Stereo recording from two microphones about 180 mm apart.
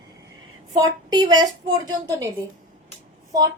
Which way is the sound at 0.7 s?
25° right (ahead or behind).